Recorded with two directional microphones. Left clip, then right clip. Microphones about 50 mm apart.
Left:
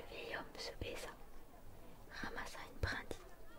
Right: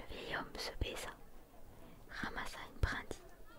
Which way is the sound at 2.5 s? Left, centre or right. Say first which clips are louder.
Right 2 dB; right.